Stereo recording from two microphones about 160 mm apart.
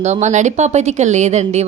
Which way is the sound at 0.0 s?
45° right (ahead or behind).